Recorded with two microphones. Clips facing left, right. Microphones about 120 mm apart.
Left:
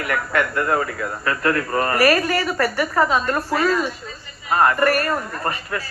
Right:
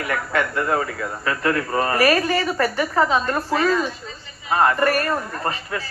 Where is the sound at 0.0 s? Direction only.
30° right (ahead or behind).